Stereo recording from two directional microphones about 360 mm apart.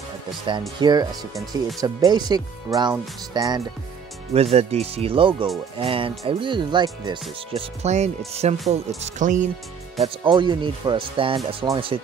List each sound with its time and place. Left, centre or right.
0.5 s speech: centre